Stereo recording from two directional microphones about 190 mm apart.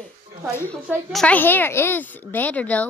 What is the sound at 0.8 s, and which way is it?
A woman's voice, 5° left (ahead or behind).